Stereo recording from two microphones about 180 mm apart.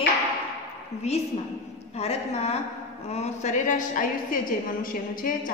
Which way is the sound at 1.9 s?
35° left (ahead or behind).